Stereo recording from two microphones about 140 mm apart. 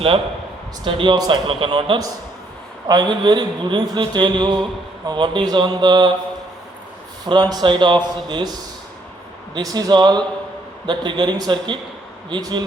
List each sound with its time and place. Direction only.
0.9 s a man's voice: 35° right (ahead or behind)
7.3 s a man's voice: 30° right (ahead or behind)
9.6 s a man's voice: 25° right (ahead or behind)